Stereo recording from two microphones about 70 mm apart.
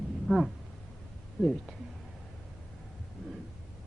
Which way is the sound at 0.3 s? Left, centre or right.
Centre.